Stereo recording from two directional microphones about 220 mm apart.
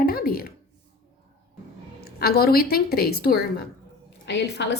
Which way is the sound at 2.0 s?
45° left (ahead or behind).